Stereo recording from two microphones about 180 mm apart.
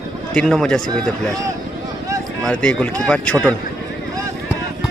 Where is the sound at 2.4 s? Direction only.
5° left (ahead or behind).